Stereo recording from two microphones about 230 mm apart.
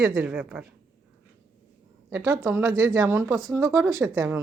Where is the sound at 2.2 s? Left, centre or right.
Centre.